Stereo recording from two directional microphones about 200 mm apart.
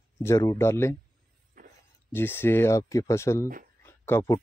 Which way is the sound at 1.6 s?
45° right (ahead or behind).